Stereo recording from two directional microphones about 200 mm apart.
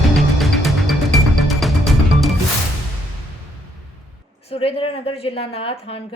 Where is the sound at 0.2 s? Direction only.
Centre (ahead or behind).